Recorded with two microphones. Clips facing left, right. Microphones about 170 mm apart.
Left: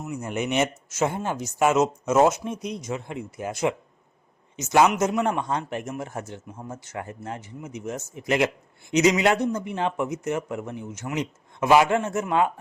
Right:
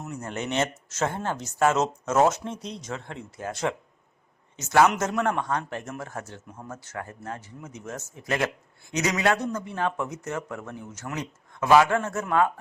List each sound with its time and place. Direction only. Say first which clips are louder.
0.0 s speech: left 4 dB; 10° left (ahead or behind)